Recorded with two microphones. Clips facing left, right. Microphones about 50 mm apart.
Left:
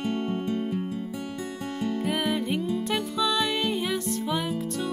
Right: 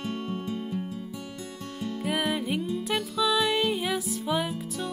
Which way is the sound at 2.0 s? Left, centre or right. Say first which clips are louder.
Right 1 dB; centre.